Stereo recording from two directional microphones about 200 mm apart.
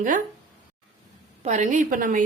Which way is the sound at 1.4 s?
35° right (ahead or behind).